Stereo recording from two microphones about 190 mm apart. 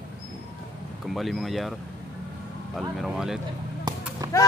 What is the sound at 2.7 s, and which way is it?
Speech, centre (ahead or behind).